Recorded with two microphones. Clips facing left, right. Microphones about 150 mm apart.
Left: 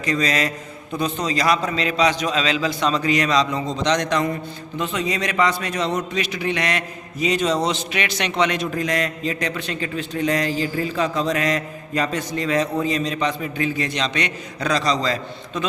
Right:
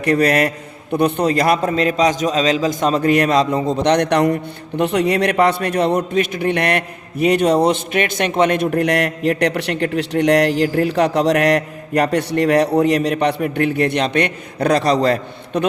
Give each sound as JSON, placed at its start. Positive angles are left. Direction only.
{"t": 0.0, "sound": "a man's voice", "side_deg": -60}